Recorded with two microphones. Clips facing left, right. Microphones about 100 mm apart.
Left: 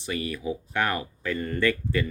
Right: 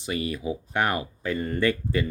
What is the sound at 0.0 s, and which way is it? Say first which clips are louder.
Speech: right 1 dB; 25° right (ahead or behind).